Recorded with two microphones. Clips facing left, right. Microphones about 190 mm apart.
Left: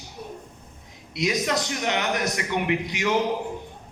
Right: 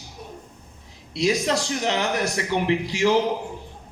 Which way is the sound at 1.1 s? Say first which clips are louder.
Right 3 dB; 30° right (ahead or behind).